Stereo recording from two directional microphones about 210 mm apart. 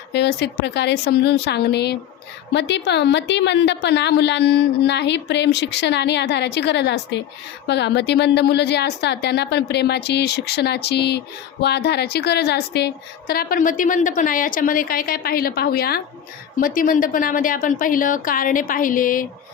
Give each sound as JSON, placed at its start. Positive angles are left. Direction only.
{"t": 0.1, "sound": "a woman's voice", "side_deg": 55}